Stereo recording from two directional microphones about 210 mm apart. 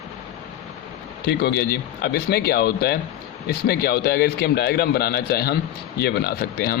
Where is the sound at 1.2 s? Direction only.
50° left (ahead or behind).